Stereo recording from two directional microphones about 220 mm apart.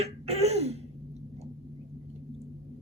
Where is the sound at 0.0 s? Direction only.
30° right (ahead or behind).